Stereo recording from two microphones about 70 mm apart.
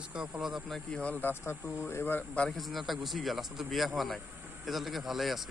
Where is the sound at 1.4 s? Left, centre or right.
Left.